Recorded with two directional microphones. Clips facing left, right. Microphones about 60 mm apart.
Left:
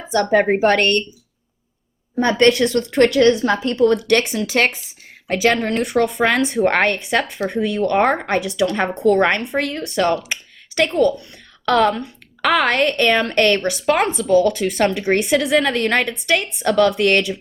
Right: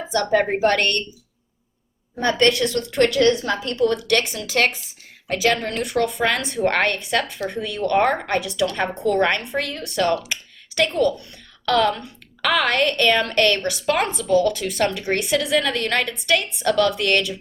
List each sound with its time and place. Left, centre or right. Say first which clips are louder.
0.3 s a woman's voice: left 3 dB; left
2.2 s a woman's voice: left 4 dB; left